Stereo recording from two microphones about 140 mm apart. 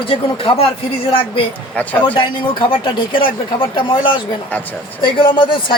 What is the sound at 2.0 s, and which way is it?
Speech, 35° left (ahead or behind).